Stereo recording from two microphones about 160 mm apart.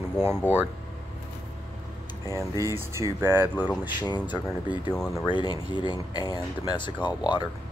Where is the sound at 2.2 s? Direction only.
20° left (ahead or behind).